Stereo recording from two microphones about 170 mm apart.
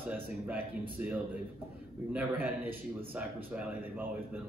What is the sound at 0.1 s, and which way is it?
Speech, 10° right (ahead or behind).